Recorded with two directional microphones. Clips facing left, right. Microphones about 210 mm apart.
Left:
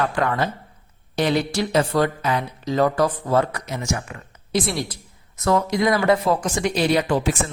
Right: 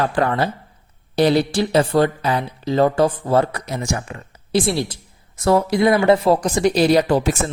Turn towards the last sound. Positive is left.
turn(degrees=-40)  # may be behind; listen again after turning